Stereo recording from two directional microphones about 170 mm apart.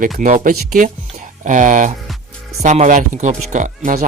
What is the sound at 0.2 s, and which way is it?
Speech, 50° right (ahead or behind).